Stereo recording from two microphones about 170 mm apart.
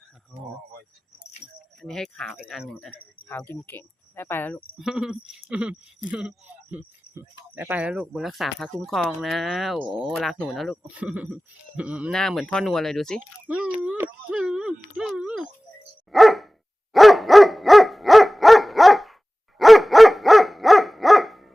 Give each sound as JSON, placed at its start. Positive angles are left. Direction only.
{"t": 1.8, "sound": "speech", "side_deg": 5}
{"t": 4.8, "sound": "speech", "side_deg": -5}
{"t": 13.5, "sound": "speech", "side_deg": -5}
{"t": 16.9, "sound": "dog", "side_deg": 0}